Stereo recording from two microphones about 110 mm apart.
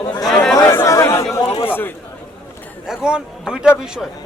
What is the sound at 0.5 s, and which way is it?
Chatter, 25° left (ahead or behind).